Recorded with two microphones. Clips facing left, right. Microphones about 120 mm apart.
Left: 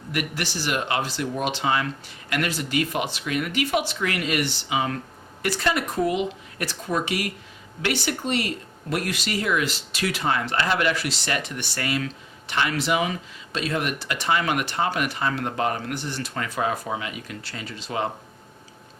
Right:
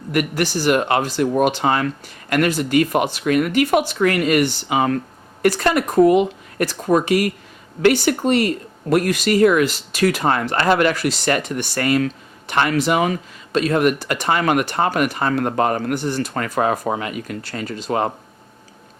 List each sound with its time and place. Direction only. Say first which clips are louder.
0.1 s speech: right 9 dB; 50° right (ahead or behind)